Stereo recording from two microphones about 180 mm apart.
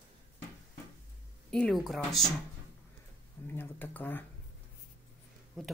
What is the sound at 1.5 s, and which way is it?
Speech, 5° left (ahead or behind).